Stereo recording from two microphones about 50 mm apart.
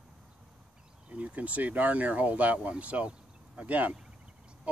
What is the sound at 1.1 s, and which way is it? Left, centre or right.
Speech, right.